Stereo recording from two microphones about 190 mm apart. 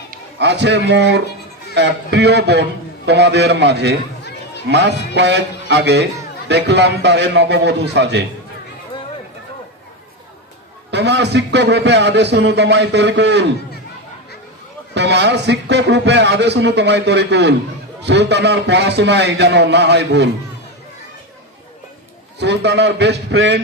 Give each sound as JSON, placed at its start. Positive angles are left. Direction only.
{"t": 0.3, "sound": "speech", "side_deg": -65}
{"t": 10.9, "sound": "speech", "side_deg": -65}
{"t": 14.9, "sound": "speech", "side_deg": -65}
{"t": 22.4, "sound": "speech", "side_deg": -65}